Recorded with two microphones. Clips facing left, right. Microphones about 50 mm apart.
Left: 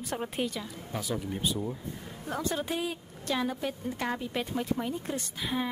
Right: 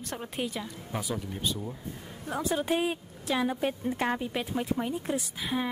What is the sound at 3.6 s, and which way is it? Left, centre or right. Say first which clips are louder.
Speech: right 4 dB; right.